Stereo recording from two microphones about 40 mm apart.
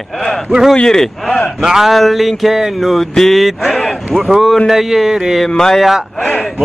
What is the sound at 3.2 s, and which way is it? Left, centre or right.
Mantra, centre.